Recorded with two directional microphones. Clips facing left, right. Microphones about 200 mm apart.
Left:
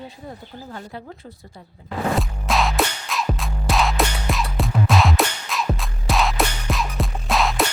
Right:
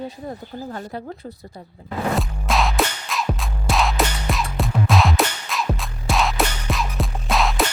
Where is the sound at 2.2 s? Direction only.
Centre (ahead or behind).